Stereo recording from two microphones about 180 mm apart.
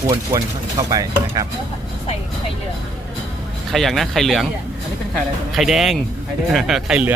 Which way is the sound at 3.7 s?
Centre (ahead or behind).